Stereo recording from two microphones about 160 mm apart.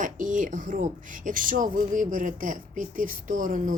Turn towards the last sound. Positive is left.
turn(degrees=-55)  # may be behind; listen again after turning